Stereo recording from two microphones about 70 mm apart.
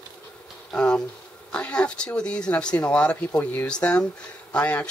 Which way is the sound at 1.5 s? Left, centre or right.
Centre.